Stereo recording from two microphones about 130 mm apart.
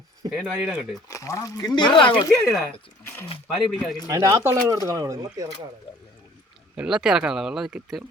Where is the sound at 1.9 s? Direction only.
40° left (ahead or behind).